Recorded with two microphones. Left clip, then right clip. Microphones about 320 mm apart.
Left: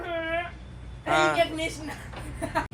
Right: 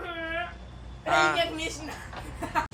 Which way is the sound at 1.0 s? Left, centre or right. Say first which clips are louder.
Even; centre.